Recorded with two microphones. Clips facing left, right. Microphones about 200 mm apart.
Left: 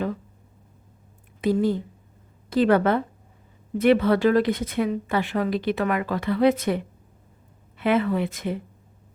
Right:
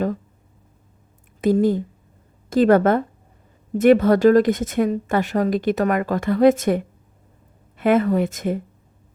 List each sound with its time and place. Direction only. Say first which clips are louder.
1.4 s a woman's voice: right 4 dB; 45° right (ahead or behind)